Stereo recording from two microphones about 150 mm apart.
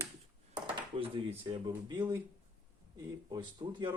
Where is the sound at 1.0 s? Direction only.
35° right (ahead or behind).